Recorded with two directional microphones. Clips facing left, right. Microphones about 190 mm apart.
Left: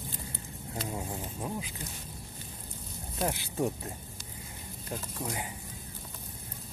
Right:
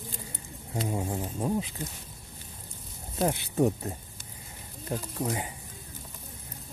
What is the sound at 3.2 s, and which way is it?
Speech, 20° right (ahead or behind).